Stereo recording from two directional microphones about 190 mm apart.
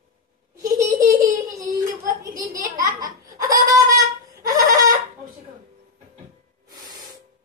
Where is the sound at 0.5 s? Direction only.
15° right (ahead or behind).